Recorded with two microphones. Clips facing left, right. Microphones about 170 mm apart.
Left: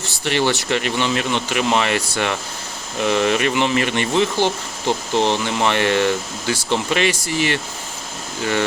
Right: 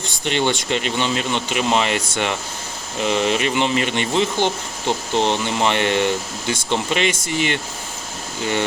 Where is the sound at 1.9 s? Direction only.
65° left (ahead or behind).